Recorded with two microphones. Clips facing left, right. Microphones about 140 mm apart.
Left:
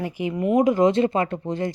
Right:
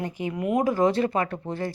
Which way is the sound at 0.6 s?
20° left (ahead or behind).